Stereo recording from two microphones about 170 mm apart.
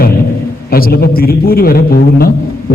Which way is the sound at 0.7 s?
60° left (ahead or behind).